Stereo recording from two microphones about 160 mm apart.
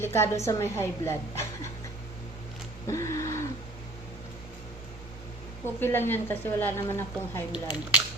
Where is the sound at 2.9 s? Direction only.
20° left (ahead or behind).